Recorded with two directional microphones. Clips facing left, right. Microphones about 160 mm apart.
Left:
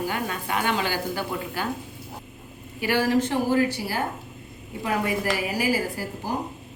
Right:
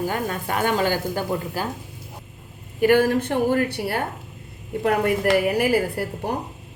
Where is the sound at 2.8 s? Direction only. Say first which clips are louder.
Right 5 dB; 55° right (ahead or behind).